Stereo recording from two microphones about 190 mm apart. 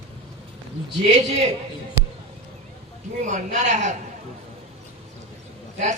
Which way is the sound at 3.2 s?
40° right (ahead or behind).